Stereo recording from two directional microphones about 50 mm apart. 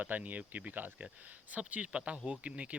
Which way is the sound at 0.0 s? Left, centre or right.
Right.